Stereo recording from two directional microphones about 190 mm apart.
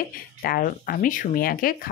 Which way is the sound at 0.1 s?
50° left (ahead or behind).